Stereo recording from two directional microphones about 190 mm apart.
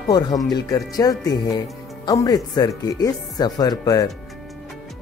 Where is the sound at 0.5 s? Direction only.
20° left (ahead or behind).